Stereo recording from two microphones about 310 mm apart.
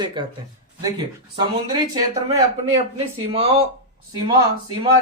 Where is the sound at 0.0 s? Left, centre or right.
Centre.